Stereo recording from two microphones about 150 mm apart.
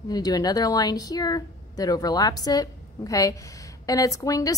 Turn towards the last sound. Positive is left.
turn(degrees=20)  # may be behind; listen again after turning